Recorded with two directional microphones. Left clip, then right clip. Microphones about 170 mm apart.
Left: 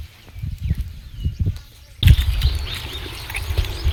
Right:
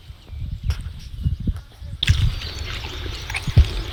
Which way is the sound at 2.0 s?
Centre (ahead or behind).